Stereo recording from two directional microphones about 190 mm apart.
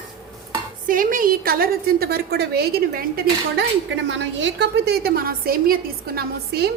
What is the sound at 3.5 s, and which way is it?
A woman's voice, 70° right (ahead or behind).